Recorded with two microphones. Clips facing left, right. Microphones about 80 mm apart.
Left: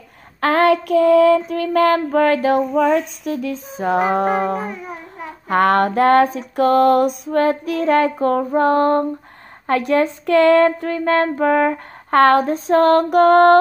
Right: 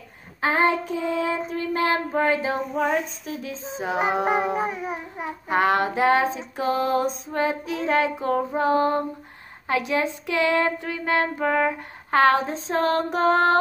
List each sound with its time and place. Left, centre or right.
0.4 s child singing: left
1.5 s female singing: left
2.7 s speech: left
3.5 s music: right
4.0 s music: centre
5.5 s female singing: left
7.8 s speech: left
11.3 s speech: left